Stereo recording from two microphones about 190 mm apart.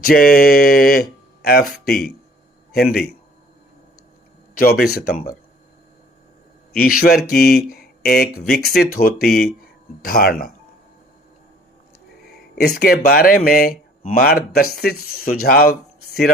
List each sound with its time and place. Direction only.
0.0 s speech: 50° left (ahead or behind)
4.5 s speech: 55° left (ahead or behind)
6.7 s speech: 50° left (ahead or behind)
12.5 s speech: 55° left (ahead or behind)